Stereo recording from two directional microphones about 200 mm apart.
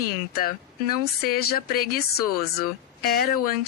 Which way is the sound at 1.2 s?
50° left (ahead or behind).